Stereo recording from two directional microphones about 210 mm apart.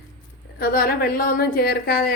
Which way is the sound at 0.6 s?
45° left (ahead or behind).